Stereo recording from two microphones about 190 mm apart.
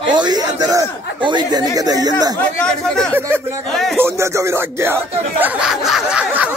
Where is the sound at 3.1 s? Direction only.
10° right (ahead or behind).